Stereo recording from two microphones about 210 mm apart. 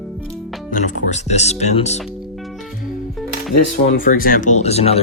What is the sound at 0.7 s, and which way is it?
Speech, 35° left (ahead or behind).